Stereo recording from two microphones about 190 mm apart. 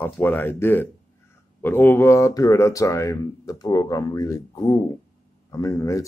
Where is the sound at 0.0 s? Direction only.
10° left (ahead or behind).